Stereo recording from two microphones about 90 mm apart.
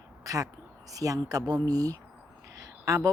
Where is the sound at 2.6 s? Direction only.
35° right (ahead or behind).